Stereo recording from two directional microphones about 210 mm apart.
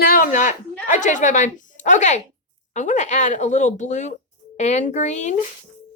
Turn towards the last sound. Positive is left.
turn(degrees=35)  # may be behind; listen again after turning